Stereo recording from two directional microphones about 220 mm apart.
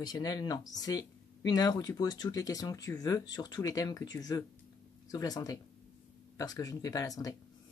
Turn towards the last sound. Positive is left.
turn(degrees=15)  # may be behind; listen again after turning